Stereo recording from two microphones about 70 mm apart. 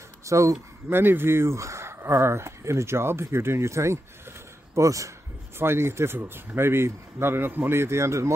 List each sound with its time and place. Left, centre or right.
0.2 s speech: right
0.8 s a man's voice: right
5.6 s speech: right